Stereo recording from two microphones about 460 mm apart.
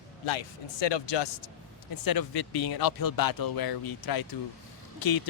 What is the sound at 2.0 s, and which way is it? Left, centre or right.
Speech, left.